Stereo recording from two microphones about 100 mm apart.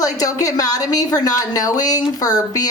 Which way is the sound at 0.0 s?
35° left (ahead or behind).